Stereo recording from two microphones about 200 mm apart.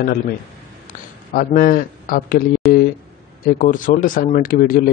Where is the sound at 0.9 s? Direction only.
40° left (ahead or behind).